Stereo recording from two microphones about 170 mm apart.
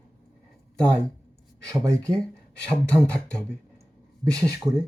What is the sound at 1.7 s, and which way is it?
Speech, 20° right (ahead or behind).